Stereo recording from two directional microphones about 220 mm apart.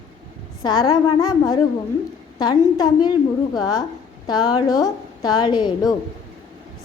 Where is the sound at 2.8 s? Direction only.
20° left (ahead or behind).